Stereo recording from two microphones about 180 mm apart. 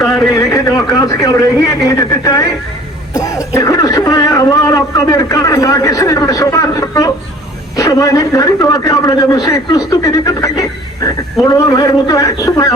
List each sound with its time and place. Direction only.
0.0 s a man's voice: 15° left (ahead or behind)